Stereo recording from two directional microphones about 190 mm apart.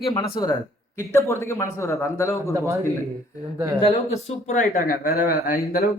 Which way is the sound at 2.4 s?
15° right (ahead or behind).